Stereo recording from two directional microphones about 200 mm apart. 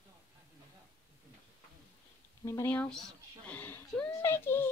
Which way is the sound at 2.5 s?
10° left (ahead or behind).